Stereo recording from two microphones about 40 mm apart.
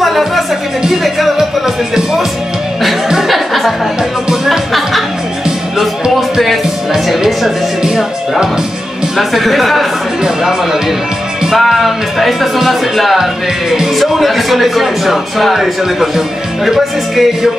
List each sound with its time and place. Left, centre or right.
0.0 s music: centre
3.3 s music: centre
7.1 s music: centre
7.8 s music: centre
9.1 s speech: centre
11.5 s speech: centre
17.1 s speech: centre